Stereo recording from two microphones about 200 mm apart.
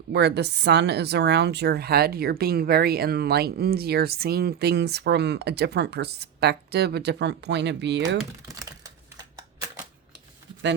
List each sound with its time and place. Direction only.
0.1 s a woman's voice: 55° right (ahead or behind)
8.5 s typewriter: 20° right (ahead or behind)